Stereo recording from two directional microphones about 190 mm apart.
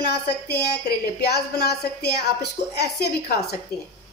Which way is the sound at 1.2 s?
55° left (ahead or behind).